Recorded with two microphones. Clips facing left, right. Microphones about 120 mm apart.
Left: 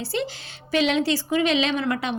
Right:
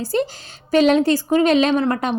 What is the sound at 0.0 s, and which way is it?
A woman's voice, 45° right (ahead or behind).